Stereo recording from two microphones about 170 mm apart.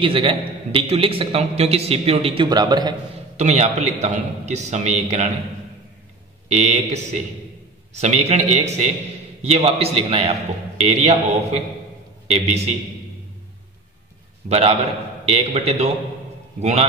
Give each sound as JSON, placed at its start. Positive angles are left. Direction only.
{"t": 0.0, "sound": "a man's voice", "side_deg": -30}
{"t": 3.3, "sound": "a man's voice", "side_deg": -40}
{"t": 6.5, "sound": "a man's voice", "side_deg": -40}
{"t": 14.5, "sound": "a man's voice", "side_deg": -35}